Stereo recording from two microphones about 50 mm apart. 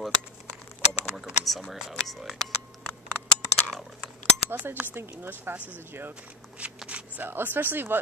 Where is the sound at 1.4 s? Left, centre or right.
Centre.